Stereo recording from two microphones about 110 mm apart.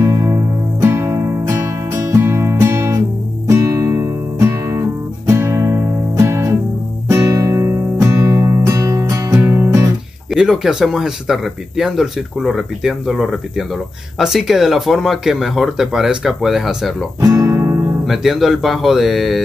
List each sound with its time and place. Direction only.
0.0 s music: 30° right (ahead or behind)
10.3 s speech: 5° right (ahead or behind)
17.2 s music: 30° right (ahead or behind)
18.0 s speech: centre (ahead or behind)